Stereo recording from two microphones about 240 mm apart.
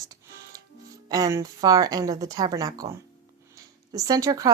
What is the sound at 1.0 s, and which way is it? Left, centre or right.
A woman's voice, centre.